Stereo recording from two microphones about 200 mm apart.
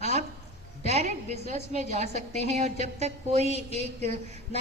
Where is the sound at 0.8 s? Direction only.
35° right (ahead or behind).